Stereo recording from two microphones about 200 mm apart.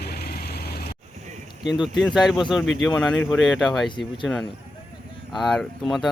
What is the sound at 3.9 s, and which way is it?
Speech, 25° left (ahead or behind).